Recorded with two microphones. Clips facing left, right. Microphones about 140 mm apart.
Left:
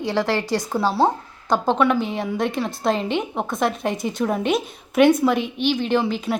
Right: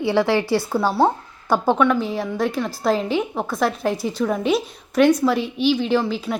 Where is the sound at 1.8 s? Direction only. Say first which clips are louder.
Right 1 dB; centre (ahead or behind).